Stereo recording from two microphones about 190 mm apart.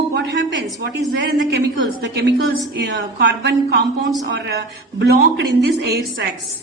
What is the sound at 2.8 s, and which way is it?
A woman's voice, 65° right (ahead or behind).